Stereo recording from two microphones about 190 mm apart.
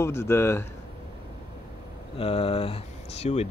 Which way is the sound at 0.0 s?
15° left (ahead or behind).